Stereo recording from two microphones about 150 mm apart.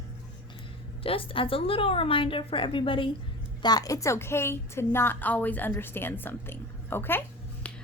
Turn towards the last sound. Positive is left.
turn(degrees=10)  # may be behind; listen again after turning